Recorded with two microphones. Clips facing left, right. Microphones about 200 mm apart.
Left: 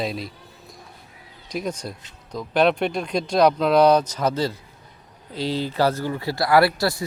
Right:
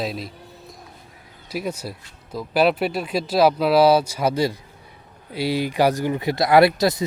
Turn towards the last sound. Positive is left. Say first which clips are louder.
# right 3 dB
turn(degrees=-20)  # may be behind; listen again after turning